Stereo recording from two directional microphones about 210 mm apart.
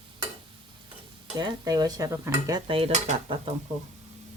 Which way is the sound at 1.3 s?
20° right (ahead or behind).